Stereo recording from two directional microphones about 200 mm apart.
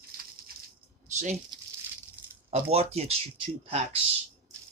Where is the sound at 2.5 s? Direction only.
30° right (ahead or behind).